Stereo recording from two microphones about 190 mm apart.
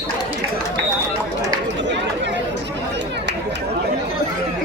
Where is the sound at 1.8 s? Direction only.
70° right (ahead or behind).